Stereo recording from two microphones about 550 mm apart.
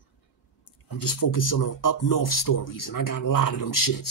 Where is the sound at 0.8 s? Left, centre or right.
Left.